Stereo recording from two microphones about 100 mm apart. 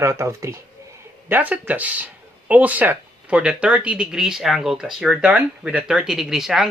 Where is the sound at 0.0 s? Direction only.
30° right (ahead or behind).